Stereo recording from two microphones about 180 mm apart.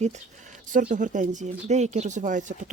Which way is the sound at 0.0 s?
40° right (ahead or behind).